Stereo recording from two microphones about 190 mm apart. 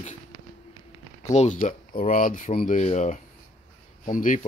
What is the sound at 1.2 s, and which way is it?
Speech, 40° left (ahead or behind).